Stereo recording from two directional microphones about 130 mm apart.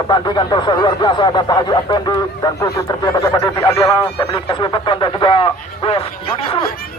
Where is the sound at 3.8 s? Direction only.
40° left (ahead or behind).